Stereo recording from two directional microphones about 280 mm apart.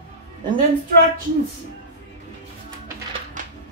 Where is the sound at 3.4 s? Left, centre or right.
Right.